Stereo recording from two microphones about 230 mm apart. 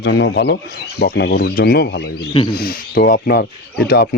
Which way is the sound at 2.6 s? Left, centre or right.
Left.